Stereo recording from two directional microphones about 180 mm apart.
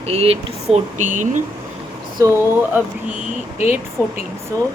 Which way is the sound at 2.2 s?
15° right (ahead or behind).